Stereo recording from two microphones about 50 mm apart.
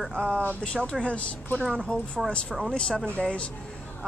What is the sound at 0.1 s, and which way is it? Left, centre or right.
Speech, right.